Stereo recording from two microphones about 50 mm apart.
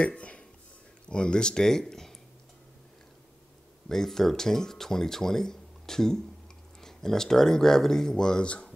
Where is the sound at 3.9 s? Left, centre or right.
Centre.